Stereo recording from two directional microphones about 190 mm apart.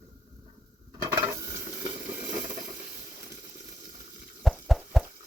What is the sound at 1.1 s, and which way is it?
Stir, 20° right (ahead or behind).